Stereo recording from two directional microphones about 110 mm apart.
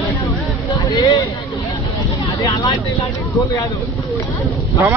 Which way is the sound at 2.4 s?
35° left (ahead or behind).